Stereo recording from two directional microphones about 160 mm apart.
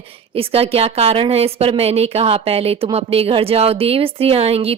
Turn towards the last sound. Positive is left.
turn(degrees=-40)  # may be behind; listen again after turning